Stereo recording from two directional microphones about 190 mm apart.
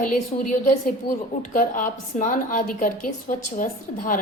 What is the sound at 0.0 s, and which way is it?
A woman's voice, 40° left (ahead or behind).